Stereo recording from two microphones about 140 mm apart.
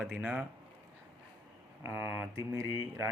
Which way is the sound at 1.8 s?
15° right (ahead or behind).